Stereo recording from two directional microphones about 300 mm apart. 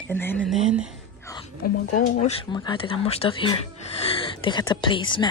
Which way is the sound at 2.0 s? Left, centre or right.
Left.